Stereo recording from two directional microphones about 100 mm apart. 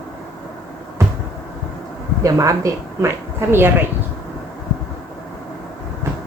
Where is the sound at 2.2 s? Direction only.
35° right (ahead or behind).